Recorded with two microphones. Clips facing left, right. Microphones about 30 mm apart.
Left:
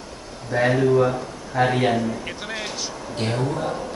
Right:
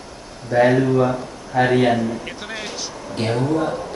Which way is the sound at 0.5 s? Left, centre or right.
Centre.